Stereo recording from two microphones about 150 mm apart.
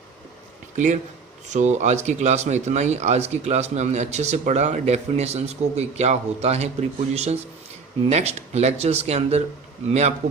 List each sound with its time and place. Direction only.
1.5 s speech: 50° right (ahead or behind)